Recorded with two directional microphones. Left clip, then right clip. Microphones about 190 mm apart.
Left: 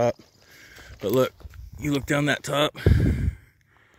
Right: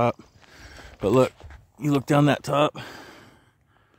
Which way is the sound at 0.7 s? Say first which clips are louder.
Right 3 dB; 30° right (ahead or behind).